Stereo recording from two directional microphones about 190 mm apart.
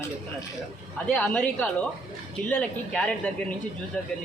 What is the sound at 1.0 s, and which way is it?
A woman's voice, 5° left (ahead or behind).